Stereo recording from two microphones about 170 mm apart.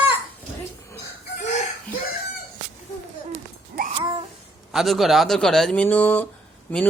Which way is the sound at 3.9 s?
25° right (ahead or behind).